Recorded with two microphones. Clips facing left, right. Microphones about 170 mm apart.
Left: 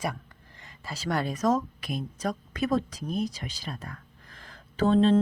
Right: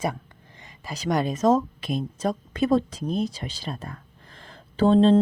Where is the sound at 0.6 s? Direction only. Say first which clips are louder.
Right 4 dB; 15° right (ahead or behind).